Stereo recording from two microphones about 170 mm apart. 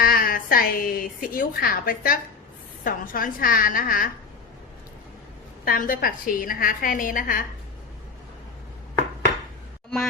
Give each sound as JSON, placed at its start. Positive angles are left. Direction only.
{"t": 0.0, "sound": "a woman's voice", "side_deg": 60}
{"t": 5.6, "sound": "a woman's voice", "side_deg": 60}